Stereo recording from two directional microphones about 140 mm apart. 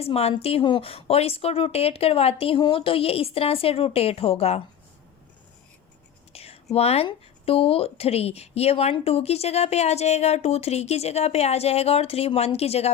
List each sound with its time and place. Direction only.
0.0 s speech: 45° left (ahead or behind)
6.3 s speech: 45° left (ahead or behind)